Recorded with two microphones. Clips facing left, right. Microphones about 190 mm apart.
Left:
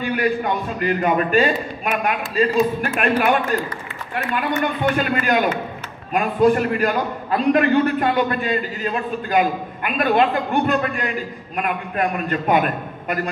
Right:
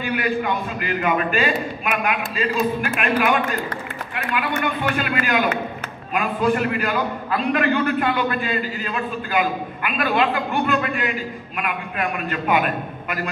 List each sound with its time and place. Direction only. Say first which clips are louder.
0.0 s a man's voice: left 2 dB; 40° left (ahead or behind)
5.1 s a man's voice: left 2 dB; 45° left (ahead or behind)